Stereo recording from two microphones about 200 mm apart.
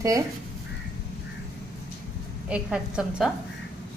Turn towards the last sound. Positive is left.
turn(degrees=-5)  # may be behind; listen again after turning